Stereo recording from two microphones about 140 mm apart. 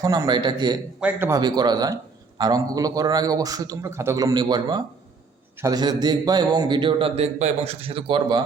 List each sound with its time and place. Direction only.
0.0 s a man's voice: 25° right (ahead or behind)
0.9 s a man's voice: 10° right (ahead or behind)
1.3 s a man's voice: 30° right (ahead or behind)